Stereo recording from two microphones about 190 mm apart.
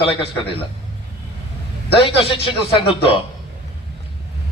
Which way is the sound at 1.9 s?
25° left (ahead or behind).